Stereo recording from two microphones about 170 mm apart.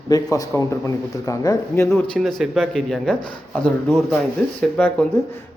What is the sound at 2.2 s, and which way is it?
Speech, centre (ahead or behind).